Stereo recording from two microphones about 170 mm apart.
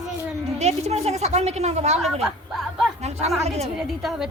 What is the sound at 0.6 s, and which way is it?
A woman's voice, 40° right (ahead or behind).